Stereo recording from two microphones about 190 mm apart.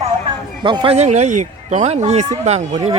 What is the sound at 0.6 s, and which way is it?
Speech, 25° right (ahead or behind).